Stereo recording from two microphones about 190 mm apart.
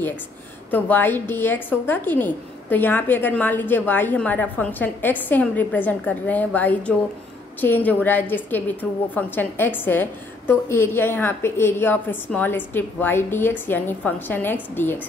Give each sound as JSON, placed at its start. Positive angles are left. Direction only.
{"t": 0.7, "sound": "a woman's voice", "side_deg": 10}